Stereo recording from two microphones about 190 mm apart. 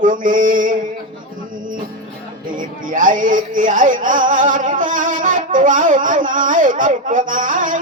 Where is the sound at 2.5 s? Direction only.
45° right (ahead or behind).